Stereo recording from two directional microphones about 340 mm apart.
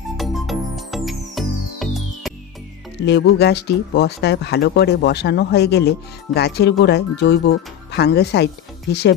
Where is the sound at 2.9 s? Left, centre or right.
Left.